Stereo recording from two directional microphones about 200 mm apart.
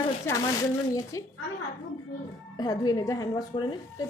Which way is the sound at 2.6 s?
20° left (ahead or behind).